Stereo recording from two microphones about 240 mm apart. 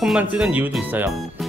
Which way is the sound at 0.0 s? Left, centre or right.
Centre.